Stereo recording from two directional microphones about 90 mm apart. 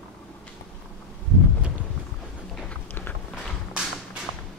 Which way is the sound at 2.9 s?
20° left (ahead or behind).